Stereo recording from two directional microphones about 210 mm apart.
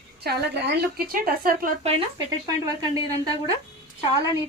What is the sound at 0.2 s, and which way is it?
A woman's voice, 50° right (ahead or behind).